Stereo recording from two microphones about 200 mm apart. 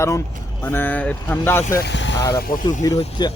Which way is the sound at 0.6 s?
10° left (ahead or behind).